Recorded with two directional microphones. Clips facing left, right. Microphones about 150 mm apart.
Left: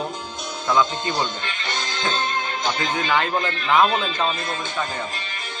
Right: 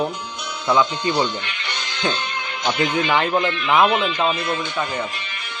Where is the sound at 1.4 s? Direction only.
45° left (ahead or behind).